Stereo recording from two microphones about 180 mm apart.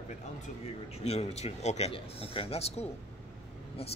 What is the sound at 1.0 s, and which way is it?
A man's voice, 35° left (ahead or behind).